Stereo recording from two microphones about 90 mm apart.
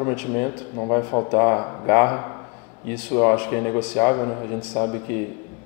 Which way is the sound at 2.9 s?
15° left (ahead or behind).